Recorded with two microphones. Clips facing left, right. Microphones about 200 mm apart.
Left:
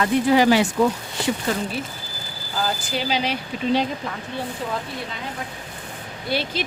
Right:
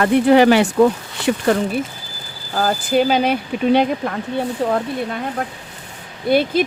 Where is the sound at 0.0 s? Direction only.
60° right (ahead or behind).